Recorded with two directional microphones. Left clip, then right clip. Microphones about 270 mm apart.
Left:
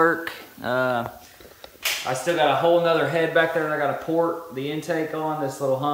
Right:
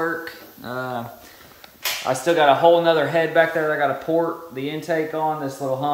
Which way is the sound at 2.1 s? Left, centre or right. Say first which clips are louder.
Right 5 dB; right.